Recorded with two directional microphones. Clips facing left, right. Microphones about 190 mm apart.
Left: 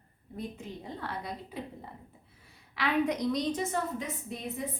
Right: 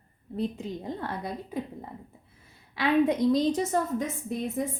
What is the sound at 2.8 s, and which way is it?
A woman's voice, 25° right (ahead or behind).